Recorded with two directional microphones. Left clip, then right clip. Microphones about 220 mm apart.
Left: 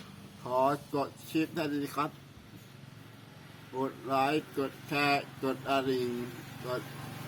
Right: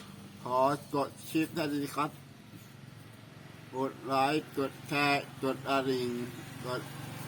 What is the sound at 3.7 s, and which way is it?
Speech, centre (ahead or behind).